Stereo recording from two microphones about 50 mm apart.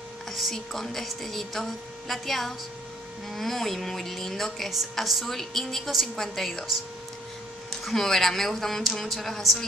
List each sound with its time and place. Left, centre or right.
0.3 s speech: centre
7.8 s speech: centre